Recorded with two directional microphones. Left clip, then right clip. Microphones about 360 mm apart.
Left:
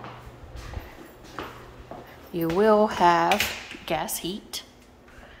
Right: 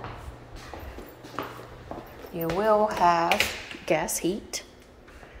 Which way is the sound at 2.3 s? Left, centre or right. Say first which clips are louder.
Left 3 dB; left.